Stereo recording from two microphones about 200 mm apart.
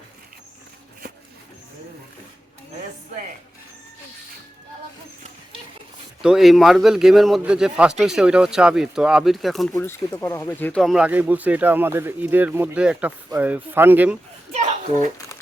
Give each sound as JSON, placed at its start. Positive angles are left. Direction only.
{"t": 6.2, "sound": "a man's voice", "side_deg": 0}
{"t": 9.7, "sound": "speech", "side_deg": 15}
{"t": 14.5, "sound": "children playing", "side_deg": -35}